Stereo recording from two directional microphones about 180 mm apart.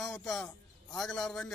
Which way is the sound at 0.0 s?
Centre (ahead or behind).